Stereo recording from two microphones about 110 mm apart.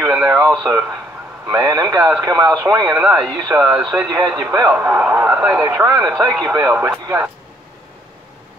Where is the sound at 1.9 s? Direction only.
10° right (ahead or behind).